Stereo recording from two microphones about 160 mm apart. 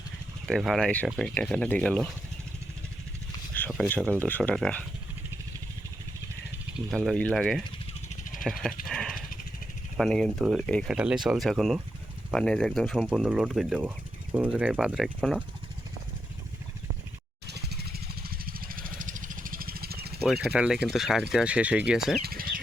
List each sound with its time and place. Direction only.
0.4 s speech: centre (ahead or behind)
3.5 s speech: 5° left (ahead or behind)
6.9 s speech: 5° left (ahead or behind)
8.1 s vehicle: 55° left (ahead or behind)
8.4 s speech: centre (ahead or behind)
8.9 s a sound: 5° left (ahead or behind)
10.0 s speech: 5° left (ahead or behind)
17.5 s vehicle: 90° right; by 20.1 s 75° right (ahead or behind)
20.2 s speech: 5° right (ahead or behind)
22.2 s bird: 65° right (ahead or behind)